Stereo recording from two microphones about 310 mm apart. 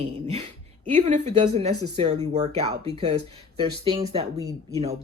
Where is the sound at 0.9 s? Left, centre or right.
Right.